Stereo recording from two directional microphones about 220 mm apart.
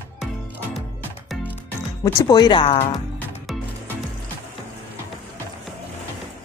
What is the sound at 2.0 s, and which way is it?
Speech, 20° left (ahead or behind).